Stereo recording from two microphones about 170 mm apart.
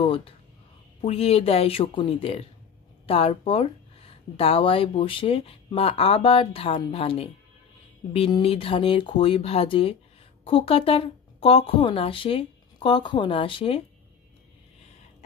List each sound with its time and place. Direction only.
0.0 s speech: 30° left (ahead or behind)